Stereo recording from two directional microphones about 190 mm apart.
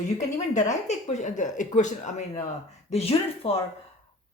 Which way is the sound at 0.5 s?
40° left (ahead or behind).